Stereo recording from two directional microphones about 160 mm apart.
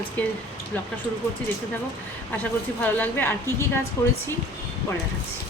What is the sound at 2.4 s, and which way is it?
A woman's voice, 10° left (ahead or behind).